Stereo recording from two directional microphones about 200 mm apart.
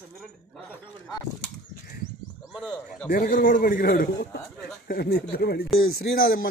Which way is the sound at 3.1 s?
45° left (ahead or behind).